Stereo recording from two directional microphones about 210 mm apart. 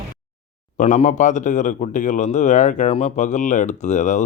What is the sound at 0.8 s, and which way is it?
A man's voice, 35° left (ahead or behind).